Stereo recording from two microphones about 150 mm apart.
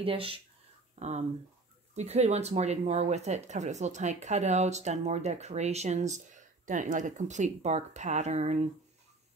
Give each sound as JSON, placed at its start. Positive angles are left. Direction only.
{"t": 0.0, "sound": "speech", "side_deg": -40}
{"t": 0.9, "sound": "speech", "side_deg": -50}